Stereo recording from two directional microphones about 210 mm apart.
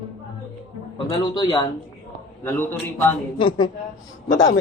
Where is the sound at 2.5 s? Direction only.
10° left (ahead or behind).